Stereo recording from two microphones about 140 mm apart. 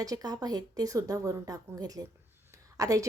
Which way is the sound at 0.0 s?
25° right (ahead or behind).